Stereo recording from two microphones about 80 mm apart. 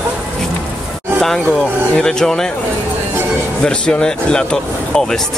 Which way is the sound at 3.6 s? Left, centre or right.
Centre.